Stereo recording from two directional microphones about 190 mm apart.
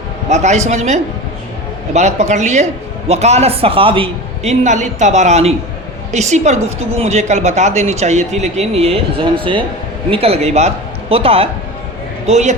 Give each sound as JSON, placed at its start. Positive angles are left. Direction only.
{"t": 0.3, "sound": "speech", "side_deg": -35}